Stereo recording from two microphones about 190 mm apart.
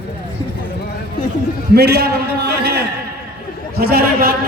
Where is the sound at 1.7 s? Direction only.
60° right (ahead or behind).